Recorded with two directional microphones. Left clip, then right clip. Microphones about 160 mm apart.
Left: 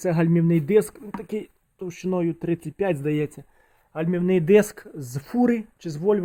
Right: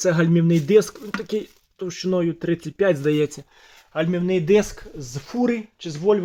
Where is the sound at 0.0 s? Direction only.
15° left (ahead or behind).